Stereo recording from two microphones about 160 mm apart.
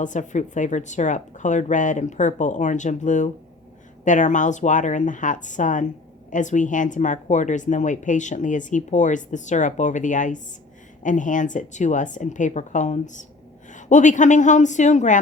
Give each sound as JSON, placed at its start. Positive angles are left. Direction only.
{"t": 0.0, "sound": "speech", "side_deg": 50}